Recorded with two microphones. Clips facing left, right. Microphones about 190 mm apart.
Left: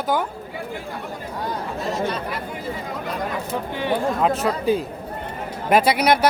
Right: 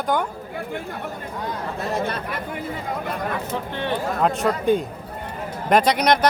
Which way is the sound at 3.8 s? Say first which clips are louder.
Left 2 dB; 10° left (ahead or behind).